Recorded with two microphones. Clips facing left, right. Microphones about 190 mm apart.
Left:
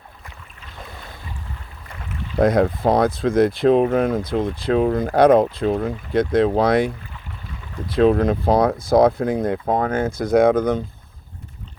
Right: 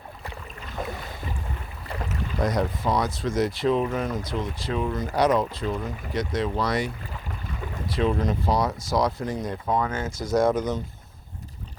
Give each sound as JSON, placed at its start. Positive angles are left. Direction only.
{"t": 2.4, "sound": "speech", "side_deg": 55}